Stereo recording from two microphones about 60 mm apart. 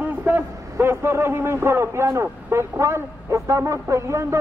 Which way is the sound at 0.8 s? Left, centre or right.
Right.